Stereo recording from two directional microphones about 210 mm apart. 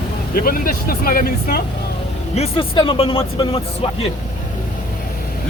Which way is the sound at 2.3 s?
30° left (ahead or behind).